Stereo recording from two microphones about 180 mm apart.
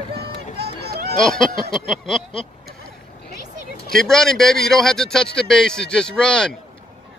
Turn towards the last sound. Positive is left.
turn(degrees=5)  # may be behind; listen again after turning